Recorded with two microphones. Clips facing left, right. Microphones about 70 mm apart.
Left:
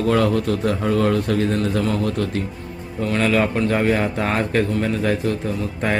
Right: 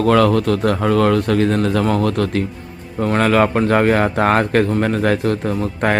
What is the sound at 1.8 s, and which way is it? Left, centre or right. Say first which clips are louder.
Speech: right 4 dB; right.